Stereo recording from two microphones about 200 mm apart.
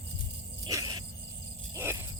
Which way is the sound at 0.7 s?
15° right (ahead or behind).